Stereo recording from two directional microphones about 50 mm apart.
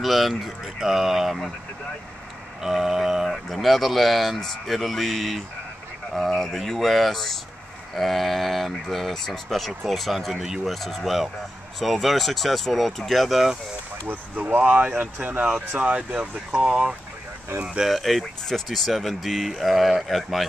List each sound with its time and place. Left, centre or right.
0.0 s speech: centre
2.6 s speech: centre
10.7 s speech: centre
14.0 s speech: right
15.4 s speech: centre
17.6 s speech: centre